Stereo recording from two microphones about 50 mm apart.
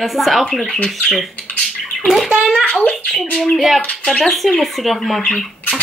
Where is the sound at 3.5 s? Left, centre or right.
Centre.